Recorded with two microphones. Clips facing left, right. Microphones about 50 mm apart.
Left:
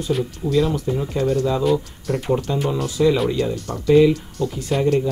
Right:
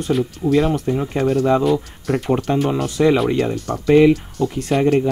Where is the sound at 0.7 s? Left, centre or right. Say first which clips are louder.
Right 3 dB; right.